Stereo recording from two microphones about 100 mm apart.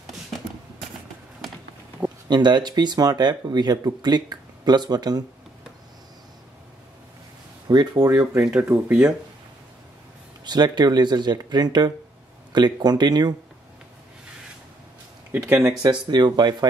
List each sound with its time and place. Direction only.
2.2 s speech: 50° right (ahead or behind)
7.6 s speech: 45° right (ahead or behind)
8.5 s speech: 20° right (ahead or behind)
10.4 s speech: 45° right (ahead or behind)
15.3 s speech: 15° right (ahead or behind)
15.8 s speech: 45° right (ahead or behind)